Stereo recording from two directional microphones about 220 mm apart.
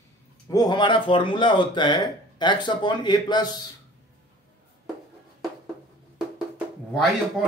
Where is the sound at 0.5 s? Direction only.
20° left (ahead or behind).